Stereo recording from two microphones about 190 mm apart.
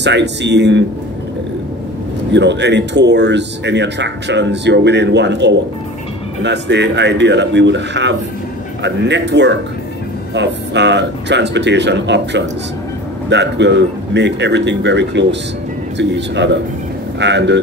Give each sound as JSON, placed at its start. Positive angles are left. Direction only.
{"t": 0.0, "sound": "speech", "side_deg": -65}
{"t": 2.3, "sound": "a man's voice", "side_deg": -65}